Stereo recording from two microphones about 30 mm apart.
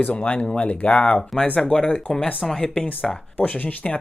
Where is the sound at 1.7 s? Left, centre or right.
Left.